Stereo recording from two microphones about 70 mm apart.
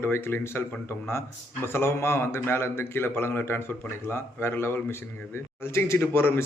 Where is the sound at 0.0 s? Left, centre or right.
Left.